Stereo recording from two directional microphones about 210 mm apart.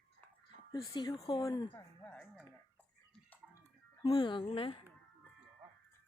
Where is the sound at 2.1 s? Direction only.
Centre (ahead or behind).